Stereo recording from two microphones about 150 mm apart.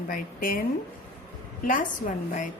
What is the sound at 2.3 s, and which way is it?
Speech, 60° left (ahead or behind).